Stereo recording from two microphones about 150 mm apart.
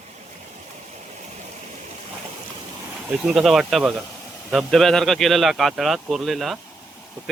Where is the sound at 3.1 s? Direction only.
5° right (ahead or behind).